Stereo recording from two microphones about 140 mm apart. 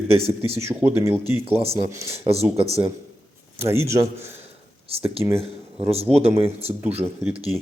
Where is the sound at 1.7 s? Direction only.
20° right (ahead or behind).